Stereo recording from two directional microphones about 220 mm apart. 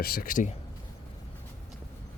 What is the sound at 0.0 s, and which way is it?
Speech, 40° left (ahead or behind).